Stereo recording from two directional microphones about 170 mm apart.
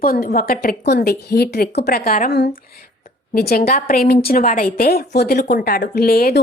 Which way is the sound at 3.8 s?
60° left (ahead or behind).